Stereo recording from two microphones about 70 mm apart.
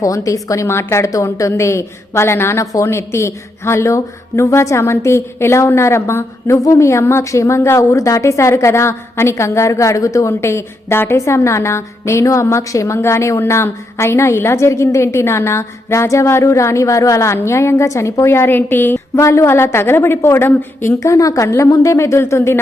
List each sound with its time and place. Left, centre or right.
0.0 s a woman's voice: left
10.8 s a woman's voice: left
19.2 s a woman's voice: left